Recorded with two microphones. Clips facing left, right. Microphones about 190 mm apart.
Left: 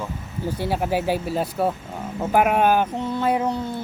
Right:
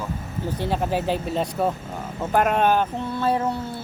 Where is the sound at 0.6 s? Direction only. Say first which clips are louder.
Left 1 dB; 10° left (ahead or behind).